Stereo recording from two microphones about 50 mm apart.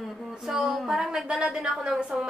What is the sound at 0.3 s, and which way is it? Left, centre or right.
A woman's voice, centre.